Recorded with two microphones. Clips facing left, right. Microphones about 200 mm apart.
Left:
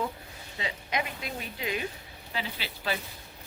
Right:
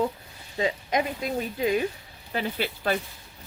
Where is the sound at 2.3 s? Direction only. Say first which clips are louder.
Right 8 dB; 50° right (ahead or behind).